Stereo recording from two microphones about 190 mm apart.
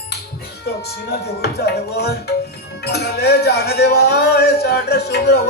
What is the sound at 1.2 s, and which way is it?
Music, 60° left (ahead or behind).